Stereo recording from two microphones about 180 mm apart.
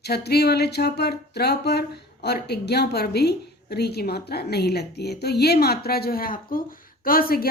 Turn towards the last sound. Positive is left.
turn(degrees=55)  # may be behind; listen again after turning